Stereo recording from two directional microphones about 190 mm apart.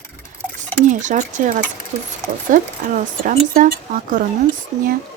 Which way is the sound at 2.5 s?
45° right (ahead or behind).